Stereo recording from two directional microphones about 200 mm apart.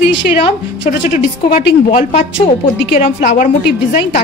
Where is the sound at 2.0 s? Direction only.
35° left (ahead or behind).